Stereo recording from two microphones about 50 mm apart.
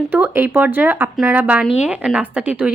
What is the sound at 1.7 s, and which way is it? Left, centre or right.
Speech, right.